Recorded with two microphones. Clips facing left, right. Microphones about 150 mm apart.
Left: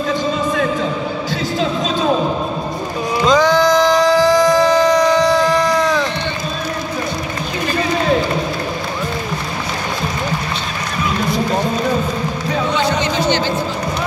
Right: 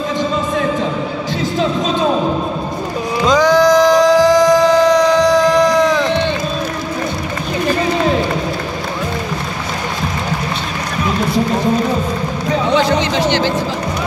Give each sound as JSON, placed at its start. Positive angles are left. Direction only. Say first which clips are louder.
{"t": 3.3, "sound": "music", "louder": "right 2 dB", "side_deg": -15}
{"t": 5.3, "sound": "a sound", "louder": "right 3 dB", "side_deg": -15}
{"t": 12.8, "sound": "music", "louder": "right 2 dB", "side_deg": -90}